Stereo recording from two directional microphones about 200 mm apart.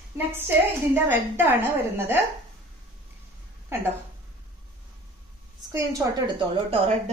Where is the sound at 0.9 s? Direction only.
10° right (ahead or behind).